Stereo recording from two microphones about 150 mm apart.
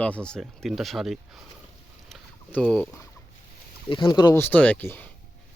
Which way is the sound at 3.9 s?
30° left (ahead or behind).